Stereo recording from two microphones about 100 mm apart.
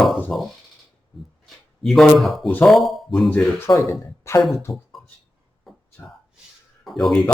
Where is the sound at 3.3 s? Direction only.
10° left (ahead or behind).